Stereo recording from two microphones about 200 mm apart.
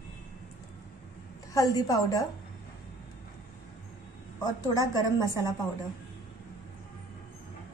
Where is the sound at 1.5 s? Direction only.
20° left (ahead or behind).